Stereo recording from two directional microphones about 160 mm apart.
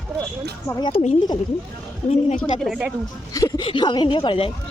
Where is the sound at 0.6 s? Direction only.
20° left (ahead or behind).